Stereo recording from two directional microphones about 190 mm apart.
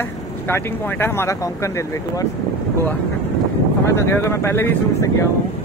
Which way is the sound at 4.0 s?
15° left (ahead or behind).